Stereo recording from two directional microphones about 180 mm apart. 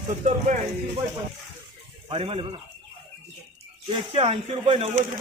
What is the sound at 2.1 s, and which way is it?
Speech, 30° right (ahead or behind).